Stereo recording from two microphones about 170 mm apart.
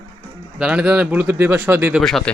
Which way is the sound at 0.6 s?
5° right (ahead or behind).